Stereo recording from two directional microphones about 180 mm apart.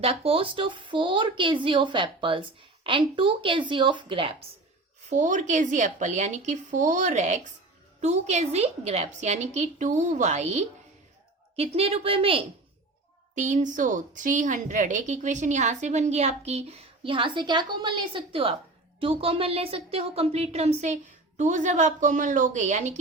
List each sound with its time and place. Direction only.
0.0 s a woman's voice: 35° right (ahead or behind)
5.0 s a woman's voice: 45° right (ahead or behind)
13.3 s a woman's voice: 45° right (ahead or behind)